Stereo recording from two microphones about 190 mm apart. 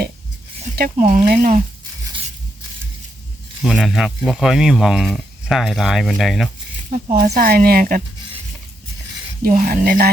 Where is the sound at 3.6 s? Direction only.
Centre (ahead or behind).